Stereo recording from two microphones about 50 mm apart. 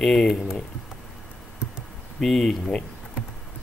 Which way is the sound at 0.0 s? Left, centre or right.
Centre.